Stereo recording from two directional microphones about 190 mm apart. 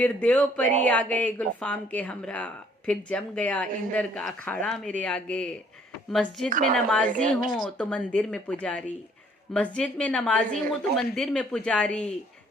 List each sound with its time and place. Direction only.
0.0 s speech: 5° left (ahead or behind)
6.5 s speech: 45° right (ahead or behind)
6.7 s speech: 5° left (ahead or behind)
7.1 s speech: 40° right (ahead or behind)
7.5 s speech: 5° left (ahead or behind)